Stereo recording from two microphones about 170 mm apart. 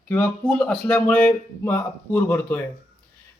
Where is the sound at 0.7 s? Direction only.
10° left (ahead or behind).